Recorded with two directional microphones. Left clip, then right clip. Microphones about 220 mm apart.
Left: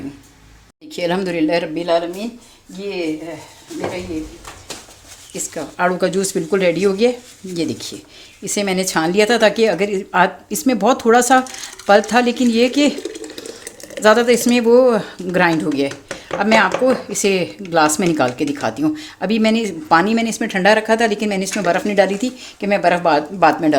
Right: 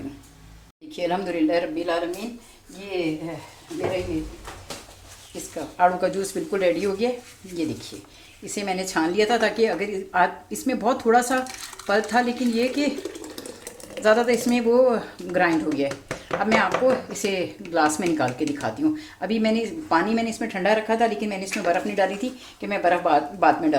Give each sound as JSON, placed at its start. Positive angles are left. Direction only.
{"t": 0.9, "sound": "speech", "side_deg": 40}
{"t": 5.7, "sound": "speech", "side_deg": 45}
{"t": 14.0, "sound": "speech", "side_deg": 50}